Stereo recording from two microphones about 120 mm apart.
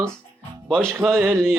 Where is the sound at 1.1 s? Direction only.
20° right (ahead or behind).